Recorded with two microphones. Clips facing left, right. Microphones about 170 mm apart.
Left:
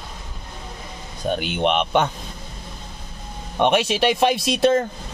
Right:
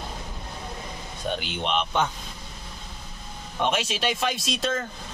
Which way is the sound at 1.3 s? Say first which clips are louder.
Left 7 dB; 55° left (ahead or behind).